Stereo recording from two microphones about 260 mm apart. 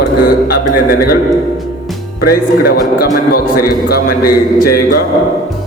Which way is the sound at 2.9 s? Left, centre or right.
Left.